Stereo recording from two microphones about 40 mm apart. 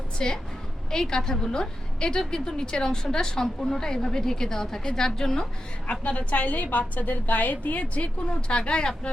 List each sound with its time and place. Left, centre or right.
0.2 s a woman's voice: centre
6.0 s a woman's voice: left